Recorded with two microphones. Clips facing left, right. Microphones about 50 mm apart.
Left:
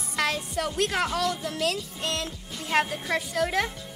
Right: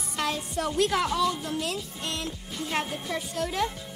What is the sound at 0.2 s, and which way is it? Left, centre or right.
Music, left.